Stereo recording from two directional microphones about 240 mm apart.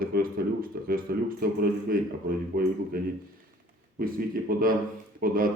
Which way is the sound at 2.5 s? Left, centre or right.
Right.